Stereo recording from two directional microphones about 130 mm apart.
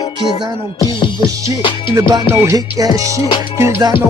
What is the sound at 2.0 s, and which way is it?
Music, 20° right (ahead or behind).